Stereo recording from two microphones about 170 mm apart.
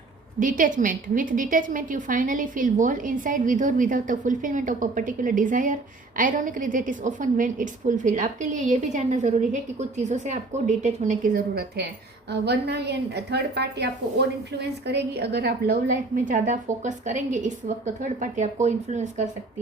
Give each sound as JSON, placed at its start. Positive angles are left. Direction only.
{"t": 0.3, "sound": "a woman's voice", "side_deg": -50}
{"t": 12.3, "sound": "a woman's voice", "side_deg": -75}